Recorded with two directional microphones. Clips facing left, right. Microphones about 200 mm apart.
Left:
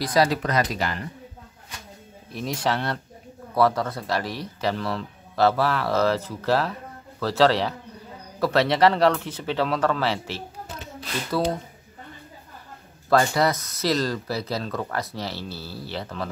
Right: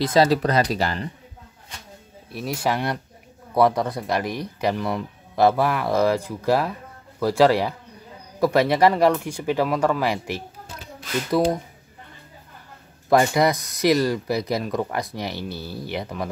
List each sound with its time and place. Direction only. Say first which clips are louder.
0.0 s speech: right 4 dB; 25° right (ahead or behind)
2.3 s speech: right 1 dB; 5° right (ahead or behind)
13.1 s speech: right 2 dB; 15° right (ahead or behind)